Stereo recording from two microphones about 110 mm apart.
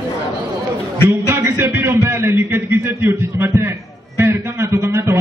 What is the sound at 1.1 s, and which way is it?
A man's voice, 20° right (ahead or behind).